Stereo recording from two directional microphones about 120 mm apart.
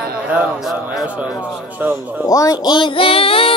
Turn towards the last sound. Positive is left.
turn(degrees=50)  # may be behind; listen again after turning